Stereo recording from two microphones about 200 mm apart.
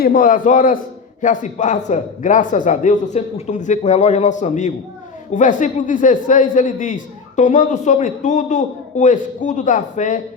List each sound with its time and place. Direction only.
0.0 s a man's voice: 45° left (ahead or behind)